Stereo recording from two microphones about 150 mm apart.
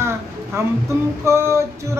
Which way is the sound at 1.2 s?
20° right (ahead or behind).